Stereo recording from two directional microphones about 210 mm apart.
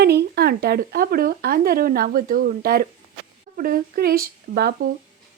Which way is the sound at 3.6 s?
45° right (ahead or behind).